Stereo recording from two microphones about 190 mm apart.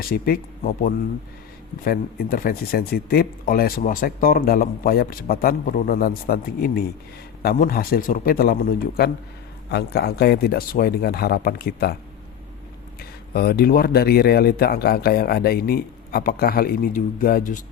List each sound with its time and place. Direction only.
0.0 s a man's voice: 50° left (ahead or behind)
13.0 s speech: 55° left (ahead or behind)